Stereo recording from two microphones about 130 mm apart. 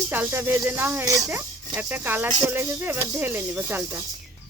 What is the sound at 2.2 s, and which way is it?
Speech, 35° right (ahead or behind).